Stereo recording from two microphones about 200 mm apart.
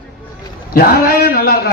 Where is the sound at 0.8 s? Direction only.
50° left (ahead or behind).